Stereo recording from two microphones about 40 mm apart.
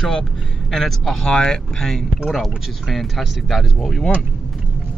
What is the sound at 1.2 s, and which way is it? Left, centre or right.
Speech, centre.